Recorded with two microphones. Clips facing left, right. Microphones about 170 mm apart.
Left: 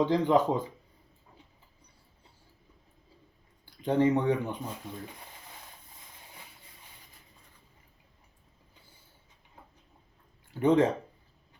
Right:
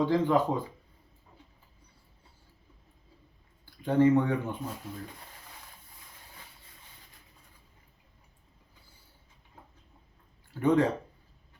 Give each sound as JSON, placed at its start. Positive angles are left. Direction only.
{"t": 0.0, "sound": "speech", "side_deg": 20}
{"t": 3.7, "sound": "speech", "side_deg": 20}
{"t": 10.5, "sound": "speech", "side_deg": 20}